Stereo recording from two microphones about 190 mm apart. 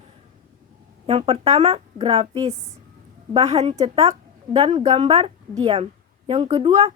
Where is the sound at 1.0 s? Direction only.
30° right (ahead or behind).